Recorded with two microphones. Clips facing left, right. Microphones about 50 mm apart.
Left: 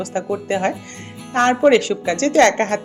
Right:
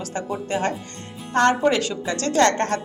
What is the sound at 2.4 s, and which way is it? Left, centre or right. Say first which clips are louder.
Speech: left 4 dB; left.